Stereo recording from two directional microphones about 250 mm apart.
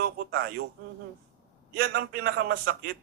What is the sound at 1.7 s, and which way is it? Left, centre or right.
Speech, right.